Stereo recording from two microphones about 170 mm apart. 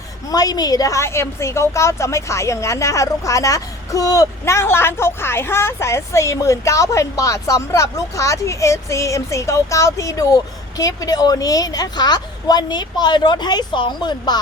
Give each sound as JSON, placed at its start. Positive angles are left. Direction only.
{"t": 0.3, "sound": "a woman's voice", "side_deg": 20}